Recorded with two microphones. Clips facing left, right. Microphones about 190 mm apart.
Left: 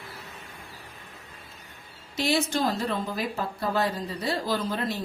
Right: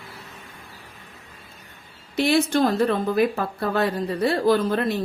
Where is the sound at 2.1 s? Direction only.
60° right (ahead or behind).